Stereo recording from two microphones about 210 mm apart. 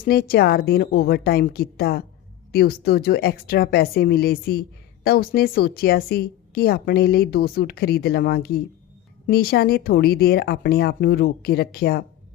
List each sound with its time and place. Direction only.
0.0 s speech: 45° left (ahead or behind)